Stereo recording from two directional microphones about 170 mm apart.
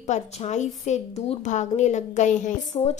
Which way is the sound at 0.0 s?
40° left (ahead or behind).